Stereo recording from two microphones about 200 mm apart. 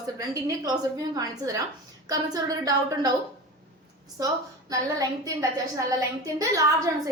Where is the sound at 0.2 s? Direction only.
15° right (ahead or behind).